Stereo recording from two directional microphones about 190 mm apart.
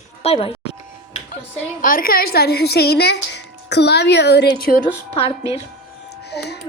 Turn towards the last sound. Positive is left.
turn(degrees=60)  # may be behind; listen again after turning